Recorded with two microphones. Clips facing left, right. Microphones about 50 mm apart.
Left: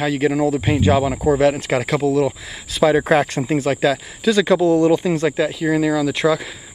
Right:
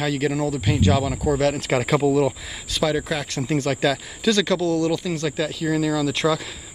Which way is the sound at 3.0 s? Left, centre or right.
Left.